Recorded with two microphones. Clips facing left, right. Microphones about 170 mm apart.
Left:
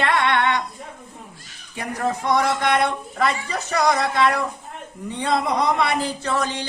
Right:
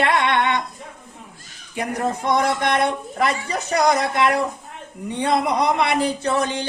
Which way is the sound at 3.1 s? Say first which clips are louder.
Right 1 dB; 20° right (ahead or behind).